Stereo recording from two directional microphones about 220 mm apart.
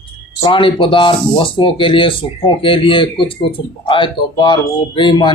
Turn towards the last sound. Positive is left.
turn(degrees=20)  # may be behind; listen again after turning